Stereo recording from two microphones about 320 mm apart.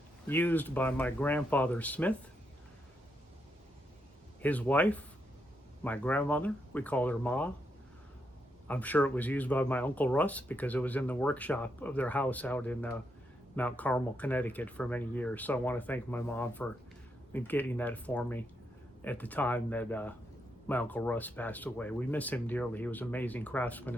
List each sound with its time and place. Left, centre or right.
0.3 s speech: centre
4.4 s speech: centre
8.6 s speech: centre